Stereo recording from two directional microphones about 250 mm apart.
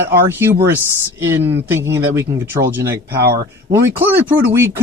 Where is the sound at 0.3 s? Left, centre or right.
Centre.